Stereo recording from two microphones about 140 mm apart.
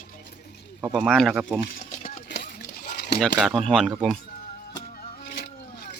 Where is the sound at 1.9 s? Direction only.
75° left (ahead or behind); by 3.2 s 90° left.